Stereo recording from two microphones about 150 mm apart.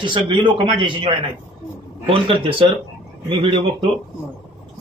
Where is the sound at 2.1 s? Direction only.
35° right (ahead or behind).